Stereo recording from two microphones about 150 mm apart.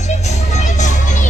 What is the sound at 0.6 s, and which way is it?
Music, 55° left (ahead or behind).